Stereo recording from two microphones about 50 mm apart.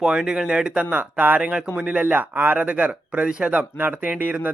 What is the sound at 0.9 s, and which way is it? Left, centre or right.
Speech, right.